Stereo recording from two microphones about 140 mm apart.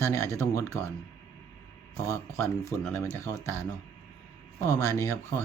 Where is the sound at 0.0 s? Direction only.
20° left (ahead or behind).